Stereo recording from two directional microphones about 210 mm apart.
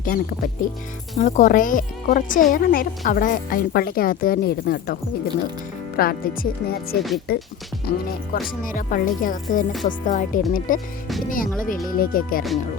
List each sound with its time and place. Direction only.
0.0 s speech: 45° left (ahead or behind)
6.0 s speech: 45° left (ahead or behind)